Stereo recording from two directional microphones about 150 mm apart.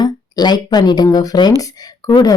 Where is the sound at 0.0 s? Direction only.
30° left (ahead or behind).